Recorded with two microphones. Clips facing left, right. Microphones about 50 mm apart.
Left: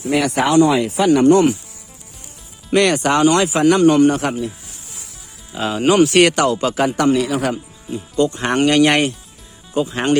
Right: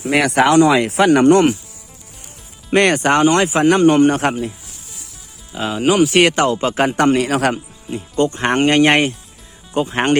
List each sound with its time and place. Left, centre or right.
0.1 s speech: right
2.7 s a man's voice: right
5.5 s speech: centre
6.3 s a man's voice: right
7.3 s speech: right
7.9 s a man's voice: right
9.7 s a man's voice: right